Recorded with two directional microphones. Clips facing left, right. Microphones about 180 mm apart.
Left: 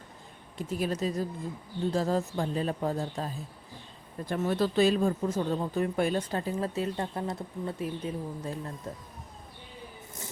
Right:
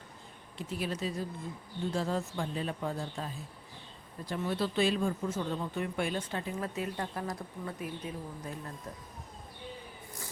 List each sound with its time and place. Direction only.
0.7 s speech: 45° left (ahead or behind)